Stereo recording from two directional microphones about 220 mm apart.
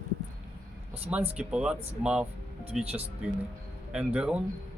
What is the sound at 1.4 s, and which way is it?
Speech, 5° right (ahead or behind).